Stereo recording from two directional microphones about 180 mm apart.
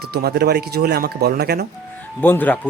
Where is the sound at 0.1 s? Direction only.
60° right (ahead or behind).